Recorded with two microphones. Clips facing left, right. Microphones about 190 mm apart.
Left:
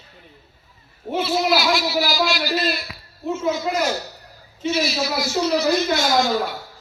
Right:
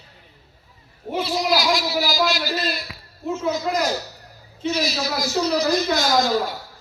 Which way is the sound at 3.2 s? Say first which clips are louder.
Left 1 dB; centre (ahead or behind).